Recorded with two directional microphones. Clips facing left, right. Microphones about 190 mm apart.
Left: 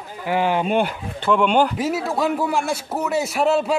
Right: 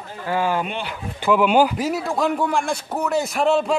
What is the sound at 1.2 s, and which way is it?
A man's voice, 5° right (ahead or behind).